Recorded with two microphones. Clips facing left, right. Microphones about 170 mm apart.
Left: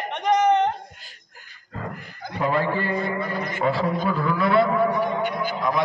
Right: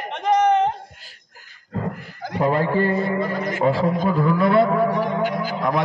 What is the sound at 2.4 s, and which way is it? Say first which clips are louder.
Speech: right 4 dB; 45° right (ahead or behind).